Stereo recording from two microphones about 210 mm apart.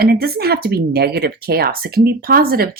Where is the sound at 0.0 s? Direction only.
45° right (ahead or behind).